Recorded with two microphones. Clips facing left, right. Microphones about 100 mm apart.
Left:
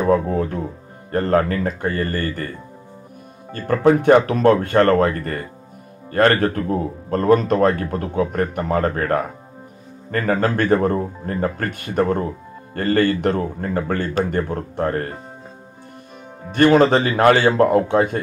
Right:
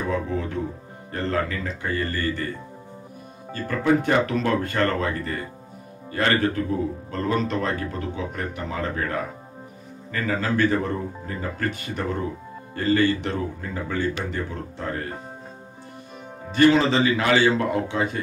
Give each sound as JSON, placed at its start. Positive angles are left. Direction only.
{"t": 0.0, "sound": "speech", "side_deg": 45}
{"t": 3.5, "sound": "speech", "side_deg": 50}
{"t": 16.5, "sound": "speech", "side_deg": 50}